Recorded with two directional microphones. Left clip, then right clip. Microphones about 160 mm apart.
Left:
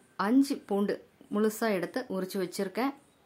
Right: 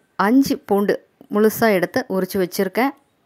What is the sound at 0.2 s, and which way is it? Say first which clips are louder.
Speech: right 10 dB; 50° right (ahead or behind).